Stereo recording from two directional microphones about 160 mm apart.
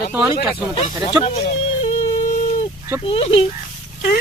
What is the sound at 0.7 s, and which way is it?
Speech, 35° left (ahead or behind).